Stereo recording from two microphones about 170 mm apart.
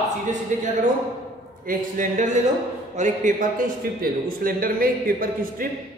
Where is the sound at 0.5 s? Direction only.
50° right (ahead or behind).